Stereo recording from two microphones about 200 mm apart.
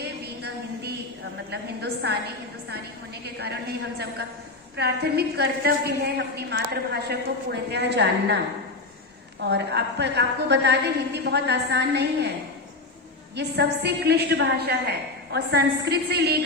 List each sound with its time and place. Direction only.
0.4 s a sound: 55° right (ahead or behind)
1.5 s a woman's voice: 55° right (ahead or behind)
3.2 s a woman's voice: 55° right (ahead or behind)
9.4 s a woman's voice: 55° right (ahead or behind)
13.3 s a woman's voice: 55° right (ahead or behind)